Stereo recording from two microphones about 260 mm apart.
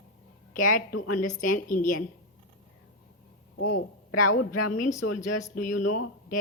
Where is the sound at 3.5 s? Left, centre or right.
Left.